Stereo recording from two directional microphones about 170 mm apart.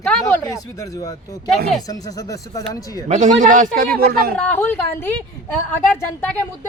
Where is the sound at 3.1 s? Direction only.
45° right (ahead or behind).